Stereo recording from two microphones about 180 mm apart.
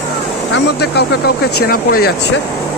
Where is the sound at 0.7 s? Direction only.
65° left (ahead or behind).